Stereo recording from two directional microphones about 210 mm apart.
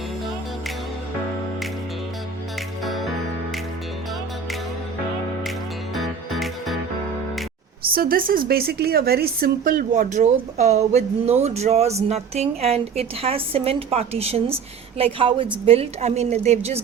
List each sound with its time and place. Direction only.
2.8 s music: centre (ahead or behind)
5.9 s music: centre (ahead or behind)
7.8 s a woman's voice: 45° right (ahead or behind)